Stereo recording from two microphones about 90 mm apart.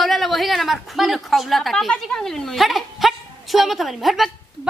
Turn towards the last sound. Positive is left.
turn(degrees=0)  # may be behind; listen again after turning